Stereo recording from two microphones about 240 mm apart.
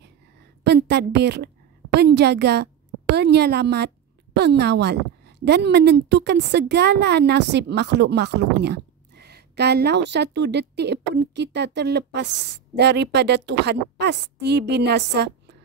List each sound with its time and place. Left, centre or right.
0.7 s a woman's voice: right